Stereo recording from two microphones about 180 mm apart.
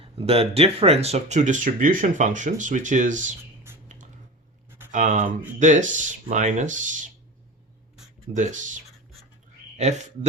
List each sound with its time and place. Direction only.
0.0 s speech: 35° right (ahead or behind)
4.9 s speech: 45° right (ahead or behind)
8.3 s speech: 40° right (ahead or behind)